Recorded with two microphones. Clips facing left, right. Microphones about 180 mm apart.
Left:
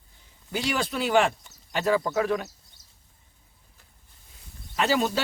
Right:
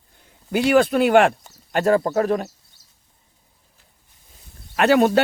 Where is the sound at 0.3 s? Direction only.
60° right (ahead or behind).